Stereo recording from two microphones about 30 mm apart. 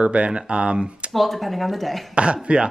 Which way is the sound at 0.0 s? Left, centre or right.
Right.